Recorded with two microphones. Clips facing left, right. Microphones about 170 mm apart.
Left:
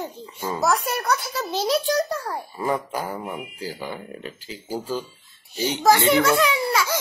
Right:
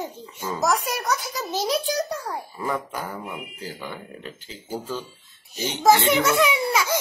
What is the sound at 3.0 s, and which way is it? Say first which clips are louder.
Speech: left 3 dB; 10° left (ahead or behind).